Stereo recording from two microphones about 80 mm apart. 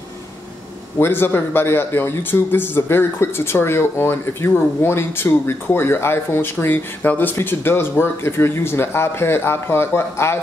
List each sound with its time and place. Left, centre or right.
0.9 s a man's voice: left